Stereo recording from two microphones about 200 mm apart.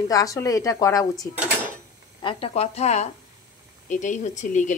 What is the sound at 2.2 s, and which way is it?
Speech, 30° left (ahead or behind).